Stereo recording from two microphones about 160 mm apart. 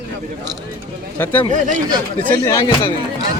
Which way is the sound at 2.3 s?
20° left (ahead or behind).